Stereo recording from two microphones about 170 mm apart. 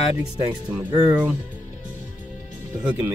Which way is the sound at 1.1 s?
10° right (ahead or behind).